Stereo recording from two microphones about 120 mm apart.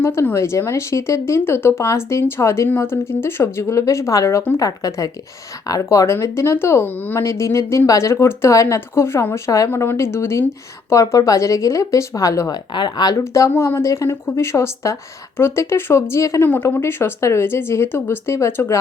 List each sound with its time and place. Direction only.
0.0 s speech: 20° left (ahead or behind)
12.7 s speech: 35° left (ahead or behind); by 18.8 s 20° left (ahead or behind)